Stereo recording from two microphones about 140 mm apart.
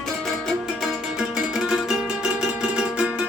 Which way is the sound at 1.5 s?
5° right (ahead or behind).